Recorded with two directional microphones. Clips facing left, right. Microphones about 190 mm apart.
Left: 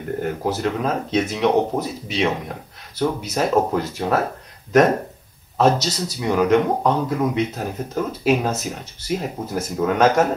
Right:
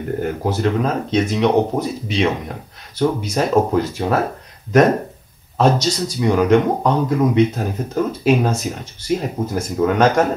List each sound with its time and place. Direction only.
0.2 s speech: centre (ahead or behind)
5.6 s speech: 5° left (ahead or behind)